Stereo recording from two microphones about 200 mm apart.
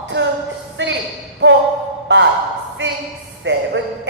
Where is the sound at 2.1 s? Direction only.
60° right (ahead or behind).